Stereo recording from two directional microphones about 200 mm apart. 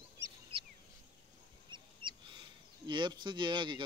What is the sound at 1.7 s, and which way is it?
Speech, 25° right (ahead or behind).